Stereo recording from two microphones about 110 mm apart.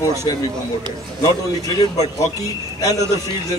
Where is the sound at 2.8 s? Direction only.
35° left (ahead or behind).